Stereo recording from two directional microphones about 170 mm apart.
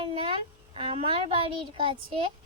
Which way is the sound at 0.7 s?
30° right (ahead or behind).